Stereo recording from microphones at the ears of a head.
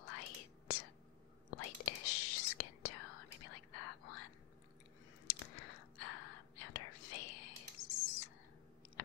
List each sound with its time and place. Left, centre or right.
0.0 s whispering: left